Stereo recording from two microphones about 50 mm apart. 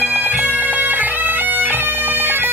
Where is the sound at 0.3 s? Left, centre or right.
Right.